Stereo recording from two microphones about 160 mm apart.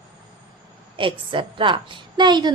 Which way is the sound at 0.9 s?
30° right (ahead or behind).